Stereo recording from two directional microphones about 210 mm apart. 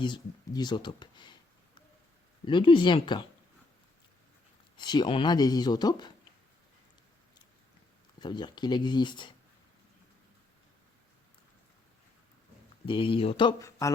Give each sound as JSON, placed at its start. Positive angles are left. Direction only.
{"t": 0.0, "sound": "speech", "side_deg": 20}
{"t": 4.8, "sound": "speech", "side_deg": 20}
{"t": 8.2, "sound": "speech", "side_deg": 20}
{"t": 12.8, "sound": "speech", "side_deg": 25}